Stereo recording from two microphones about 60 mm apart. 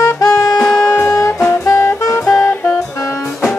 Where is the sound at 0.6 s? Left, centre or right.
Centre.